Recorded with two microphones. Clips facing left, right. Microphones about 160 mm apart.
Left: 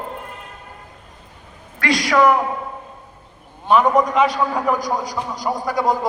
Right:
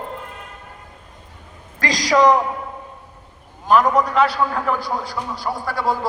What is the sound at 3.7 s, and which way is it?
A man's voice, 10° left (ahead or behind).